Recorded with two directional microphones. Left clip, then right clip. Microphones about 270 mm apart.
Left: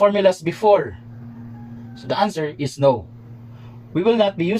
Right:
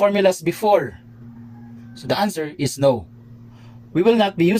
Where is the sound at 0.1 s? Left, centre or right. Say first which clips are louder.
Even; right.